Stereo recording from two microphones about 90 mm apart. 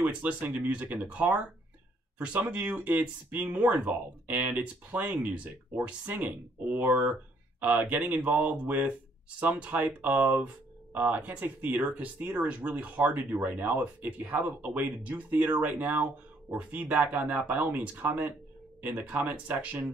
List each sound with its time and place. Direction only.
0.0 s speech: 20° right (ahead or behind)